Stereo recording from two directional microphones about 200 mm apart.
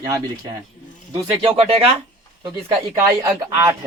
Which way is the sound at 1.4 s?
30° right (ahead or behind).